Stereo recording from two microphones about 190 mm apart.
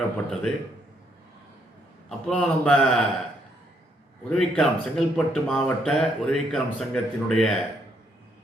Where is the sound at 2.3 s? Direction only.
5° left (ahead or behind).